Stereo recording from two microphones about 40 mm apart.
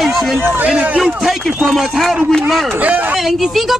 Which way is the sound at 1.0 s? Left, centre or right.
Centre.